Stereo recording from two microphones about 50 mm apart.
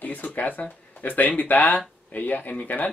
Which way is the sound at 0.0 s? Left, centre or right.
Left.